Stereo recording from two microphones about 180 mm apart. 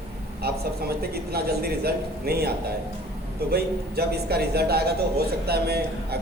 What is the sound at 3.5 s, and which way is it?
A man's voice, 60° right (ahead or behind).